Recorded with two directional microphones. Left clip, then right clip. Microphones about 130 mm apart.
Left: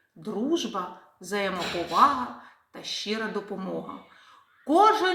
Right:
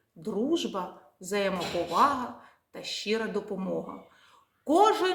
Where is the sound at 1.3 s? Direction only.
40° right (ahead or behind).